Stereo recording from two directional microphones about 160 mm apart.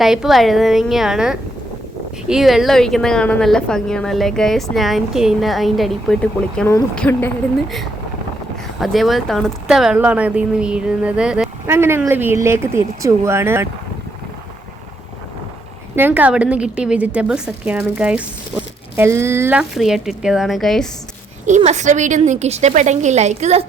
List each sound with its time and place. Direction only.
0.0 s a woman's voice: 5° right (ahead or behind); by 7.3 s 15° left (ahead or behind)
8.8 s a woman's voice: centre (ahead or behind)
11.6 s speech: 15° right (ahead or behind)
16.0 s a woman's voice: 10° right (ahead or behind)
21.4 s a woman's voice: 45° right (ahead or behind)